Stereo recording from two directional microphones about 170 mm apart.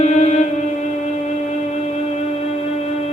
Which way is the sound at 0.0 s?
45° left (ahead or behind).